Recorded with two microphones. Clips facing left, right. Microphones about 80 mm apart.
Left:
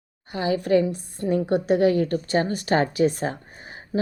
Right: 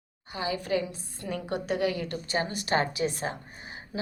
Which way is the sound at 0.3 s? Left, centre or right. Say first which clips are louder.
Left 9 dB; left.